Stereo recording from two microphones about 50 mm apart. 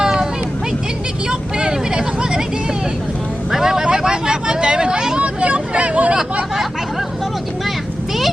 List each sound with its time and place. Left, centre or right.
0.0 s vehicle: centre
1.3 s vehicle: centre
3.5 s hubbub: centre; by 6.1 s right